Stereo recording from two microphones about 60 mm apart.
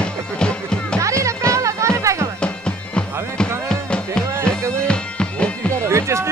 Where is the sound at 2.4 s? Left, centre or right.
Centre.